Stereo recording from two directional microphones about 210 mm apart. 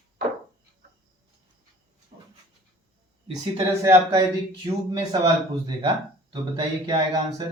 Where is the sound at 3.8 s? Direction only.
20° right (ahead or behind).